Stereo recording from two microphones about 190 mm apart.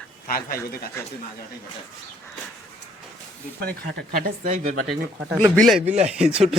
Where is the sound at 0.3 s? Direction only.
50° left (ahead or behind).